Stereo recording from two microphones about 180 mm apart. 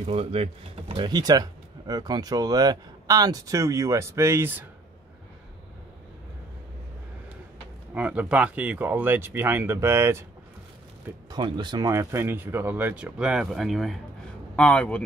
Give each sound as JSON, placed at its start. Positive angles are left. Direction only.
{"t": 0.0, "sound": "speech", "side_deg": -35}
{"t": 7.9, "sound": "speech", "side_deg": -10}
{"t": 11.2, "sound": "speech", "side_deg": -25}